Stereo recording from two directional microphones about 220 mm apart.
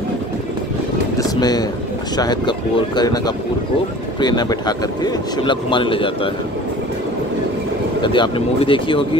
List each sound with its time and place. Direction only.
1.1 s a sound: 15° left (ahead or behind)
2.1 s speech: 20° left (ahead or behind)
8.0 s speech: 20° left (ahead or behind)